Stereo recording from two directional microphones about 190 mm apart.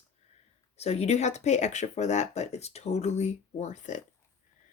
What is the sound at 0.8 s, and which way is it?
Speech, 35° left (ahead or behind).